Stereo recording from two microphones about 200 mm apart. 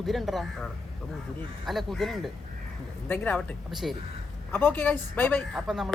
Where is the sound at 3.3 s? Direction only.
Centre (ahead or behind).